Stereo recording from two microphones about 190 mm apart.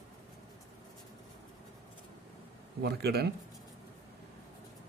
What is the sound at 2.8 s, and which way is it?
Speech, 60° right (ahead or behind).